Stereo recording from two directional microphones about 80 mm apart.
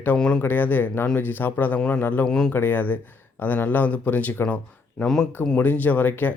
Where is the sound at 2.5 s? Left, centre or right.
Left.